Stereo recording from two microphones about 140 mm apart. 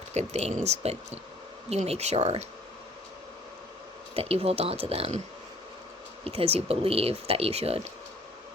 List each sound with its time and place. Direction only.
0.1 s speech: 50° right (ahead or behind)
4.1 s speech: 45° right (ahead or behind)
6.2 s speech: 45° right (ahead or behind)